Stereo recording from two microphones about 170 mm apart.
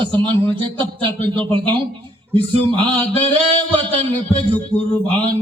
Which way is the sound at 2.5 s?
30° right (ahead or behind).